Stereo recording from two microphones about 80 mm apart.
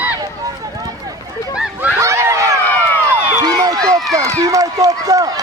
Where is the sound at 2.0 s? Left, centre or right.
Right.